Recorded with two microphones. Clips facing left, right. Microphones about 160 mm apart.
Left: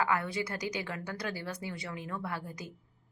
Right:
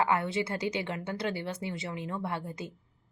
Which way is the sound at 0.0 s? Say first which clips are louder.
Right 3 dB; 25° right (ahead or behind).